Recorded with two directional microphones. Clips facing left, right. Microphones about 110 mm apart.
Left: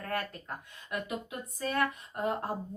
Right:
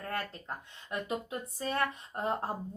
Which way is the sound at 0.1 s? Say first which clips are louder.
Left 2 dB; 30° right (ahead or behind).